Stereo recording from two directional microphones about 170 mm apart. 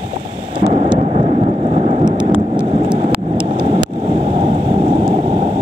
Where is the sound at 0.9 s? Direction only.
35° right (ahead or behind).